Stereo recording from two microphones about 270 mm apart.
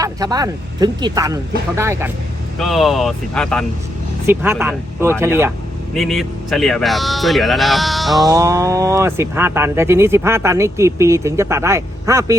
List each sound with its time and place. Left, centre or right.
0.0 s speech: centre
4.3 s speech: centre
8.3 s speech: centre